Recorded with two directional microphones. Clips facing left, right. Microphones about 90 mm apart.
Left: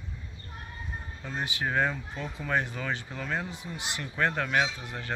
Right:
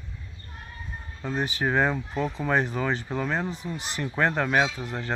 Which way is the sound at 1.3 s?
35° right (ahead or behind).